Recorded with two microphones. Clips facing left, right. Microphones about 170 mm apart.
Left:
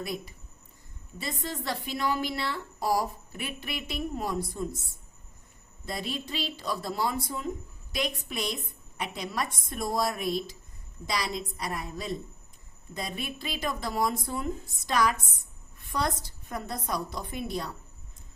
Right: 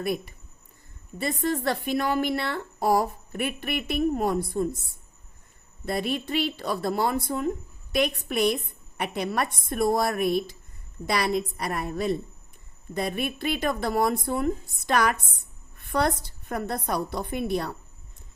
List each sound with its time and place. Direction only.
0.0 s a woman's voice: 60° right (ahead or behind)
5.8 s a woman's voice: 60° right (ahead or behind)